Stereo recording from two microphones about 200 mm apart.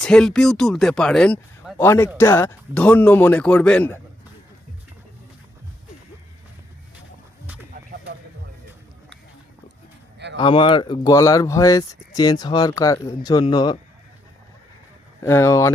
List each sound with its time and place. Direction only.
0.0 s speech: 5° left (ahead or behind)
7.7 s bird: 45° right (ahead or behind)
10.3 s speech: 25° left (ahead or behind)
15.2 s speech: 15° left (ahead or behind)